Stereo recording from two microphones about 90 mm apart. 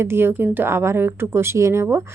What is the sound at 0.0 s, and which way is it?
Speech, 25° right (ahead or behind).